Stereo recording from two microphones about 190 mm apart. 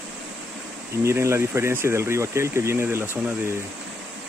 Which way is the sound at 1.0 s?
15° right (ahead or behind).